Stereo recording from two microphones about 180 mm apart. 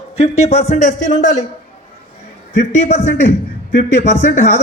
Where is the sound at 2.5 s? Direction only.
40° left (ahead or behind).